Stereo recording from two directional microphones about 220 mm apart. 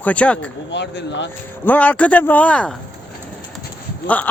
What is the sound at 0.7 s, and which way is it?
Speech, 55° left (ahead or behind).